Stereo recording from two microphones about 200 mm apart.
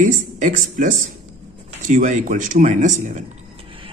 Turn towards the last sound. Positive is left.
turn(degrees=-40)  # may be behind; listen again after turning